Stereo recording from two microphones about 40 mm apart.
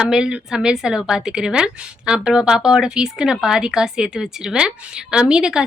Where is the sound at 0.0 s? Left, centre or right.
Centre.